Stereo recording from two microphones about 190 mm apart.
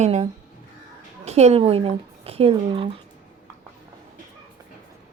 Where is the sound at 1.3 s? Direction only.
35° right (ahead or behind).